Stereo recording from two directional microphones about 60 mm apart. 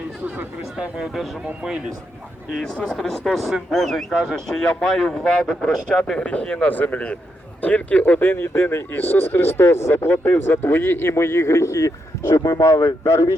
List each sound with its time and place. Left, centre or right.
0.8 s speech: centre
2.7 s speech: centre; by 13.1 s left